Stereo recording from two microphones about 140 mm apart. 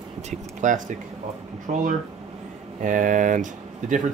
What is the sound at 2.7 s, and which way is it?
Speech, 65° right (ahead or behind).